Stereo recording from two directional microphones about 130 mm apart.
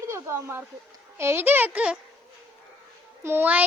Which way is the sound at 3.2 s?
15° right (ahead or behind).